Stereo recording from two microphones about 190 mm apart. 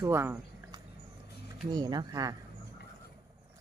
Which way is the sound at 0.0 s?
15° right (ahead or behind).